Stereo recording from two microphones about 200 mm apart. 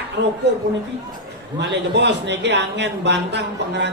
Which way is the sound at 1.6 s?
60° right (ahead or behind).